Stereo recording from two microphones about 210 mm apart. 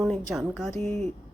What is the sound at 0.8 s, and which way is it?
Speech, 30° right (ahead or behind).